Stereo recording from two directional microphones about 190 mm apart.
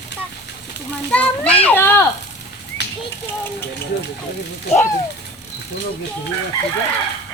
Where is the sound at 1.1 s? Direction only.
5° left (ahead or behind).